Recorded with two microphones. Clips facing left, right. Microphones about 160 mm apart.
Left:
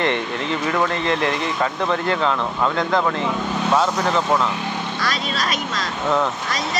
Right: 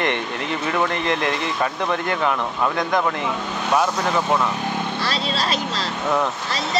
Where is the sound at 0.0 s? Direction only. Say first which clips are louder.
Left 2 dB; 20° left (ahead or behind).